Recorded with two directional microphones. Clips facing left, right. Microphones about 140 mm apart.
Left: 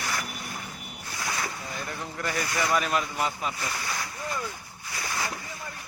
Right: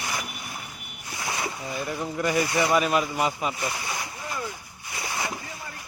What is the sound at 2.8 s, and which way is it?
Speech, 5° right (ahead or behind).